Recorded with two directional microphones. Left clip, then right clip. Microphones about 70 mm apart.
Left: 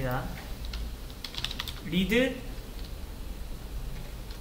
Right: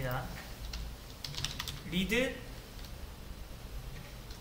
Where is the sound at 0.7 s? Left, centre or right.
Left.